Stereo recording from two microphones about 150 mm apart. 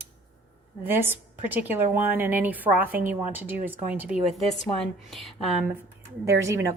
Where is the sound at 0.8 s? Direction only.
15° right (ahead or behind).